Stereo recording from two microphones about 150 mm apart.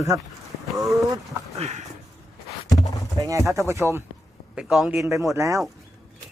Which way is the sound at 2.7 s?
25° left (ahead or behind).